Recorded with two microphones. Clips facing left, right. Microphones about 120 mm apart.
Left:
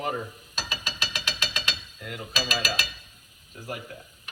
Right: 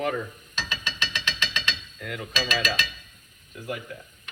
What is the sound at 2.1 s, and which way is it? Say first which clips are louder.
Mechanisms: right 2 dB; 35° left (ahead or behind).